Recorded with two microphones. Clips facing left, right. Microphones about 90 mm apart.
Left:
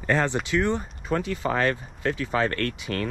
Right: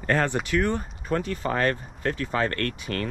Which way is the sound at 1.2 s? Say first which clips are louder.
Left 1 dB; 45° right (ahead or behind).